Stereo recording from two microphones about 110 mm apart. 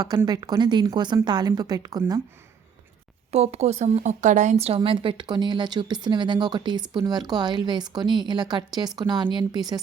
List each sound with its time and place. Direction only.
0.3 s a woman's voice: 35° right (ahead or behind)
3.3 s speech: 70° right (ahead or behind); by 9.8 s 35° right (ahead or behind)